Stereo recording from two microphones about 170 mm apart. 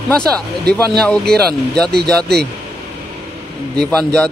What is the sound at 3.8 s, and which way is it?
Speech, 5° left (ahead or behind).